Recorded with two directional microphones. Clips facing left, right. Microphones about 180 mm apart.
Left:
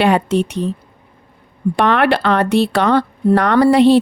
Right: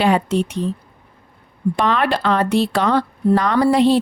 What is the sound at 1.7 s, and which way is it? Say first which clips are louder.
Speech: left 5 dB; 65° left (ahead or behind).